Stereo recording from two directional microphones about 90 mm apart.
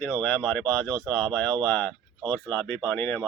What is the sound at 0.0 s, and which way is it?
Speech, 15° left (ahead or behind).